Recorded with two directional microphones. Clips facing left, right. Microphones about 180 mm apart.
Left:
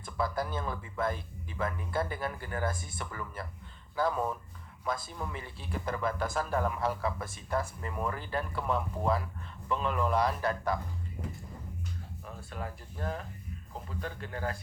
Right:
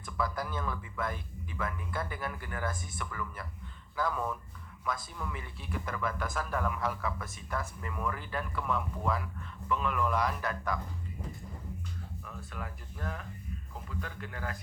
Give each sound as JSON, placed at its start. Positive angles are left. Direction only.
{"t": 0.0, "sound": "speech", "side_deg": 30}
{"t": 12.2, "sound": "speech", "side_deg": 30}